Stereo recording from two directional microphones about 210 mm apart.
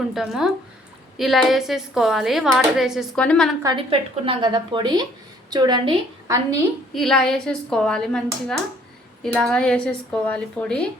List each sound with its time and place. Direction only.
0.1 s speech: centre (ahead or behind)
3.6 s a woman's voice: 20° right (ahead or behind)
6.9 s speech: centre (ahead or behind)